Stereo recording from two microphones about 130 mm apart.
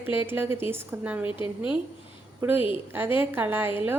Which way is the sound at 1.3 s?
40° left (ahead or behind).